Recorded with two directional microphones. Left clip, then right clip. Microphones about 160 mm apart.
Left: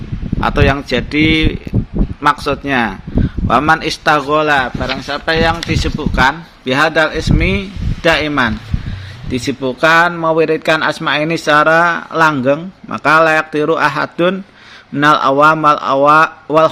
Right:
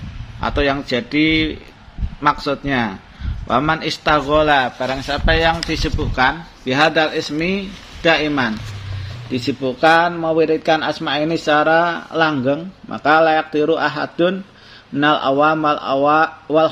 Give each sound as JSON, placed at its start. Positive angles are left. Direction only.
{"t": 0.3, "sound": "a man's voice", "side_deg": 30}